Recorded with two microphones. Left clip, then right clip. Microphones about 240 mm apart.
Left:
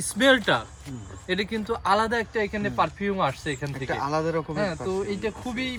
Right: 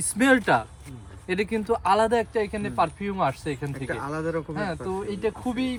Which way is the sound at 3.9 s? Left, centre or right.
Left.